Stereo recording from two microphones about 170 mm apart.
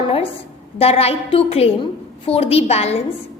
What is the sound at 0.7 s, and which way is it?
A woman's voice, 35° left (ahead or behind).